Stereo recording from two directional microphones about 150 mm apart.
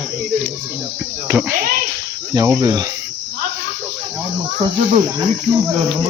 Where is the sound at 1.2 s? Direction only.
15° right (ahead or behind).